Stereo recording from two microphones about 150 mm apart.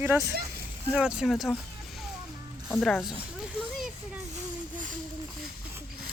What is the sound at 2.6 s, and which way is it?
Speech, centre (ahead or behind).